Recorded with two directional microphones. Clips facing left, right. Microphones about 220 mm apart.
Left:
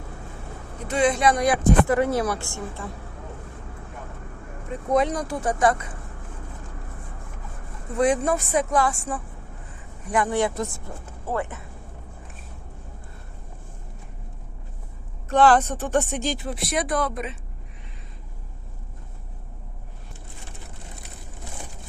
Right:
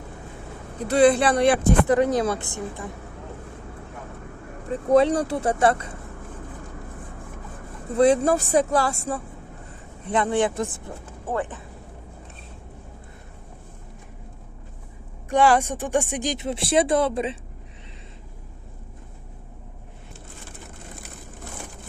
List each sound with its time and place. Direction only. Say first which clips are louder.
0.8 s speech: right 5 dB; 35° right (ahead or behind)
1.9 s speech: right 2 dB; 20° right (ahead or behind)
4.7 s speech: right 5 dB; 30° right (ahead or behind)
7.9 s speech: right 3 dB; 30° right (ahead or behind)
10.1 s speech: right 1 dB; 20° right (ahead or behind)
15.3 s speech: left 1 dB; 10° right (ahead or behind); by 17.3 s 30° right (ahead or behind)